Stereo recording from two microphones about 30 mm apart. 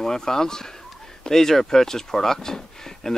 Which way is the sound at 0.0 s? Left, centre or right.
Centre.